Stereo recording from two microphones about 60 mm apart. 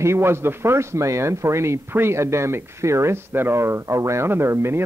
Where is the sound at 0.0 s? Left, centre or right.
Right.